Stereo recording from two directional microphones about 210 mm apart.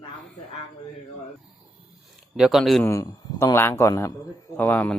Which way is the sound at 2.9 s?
15° left (ahead or behind).